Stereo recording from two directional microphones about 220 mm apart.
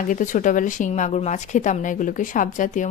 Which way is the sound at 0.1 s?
35° left (ahead or behind).